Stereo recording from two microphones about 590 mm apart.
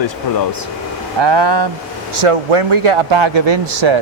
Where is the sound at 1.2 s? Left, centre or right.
Right.